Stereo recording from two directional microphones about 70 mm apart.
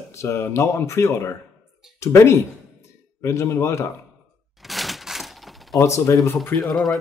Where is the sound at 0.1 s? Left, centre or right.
Left.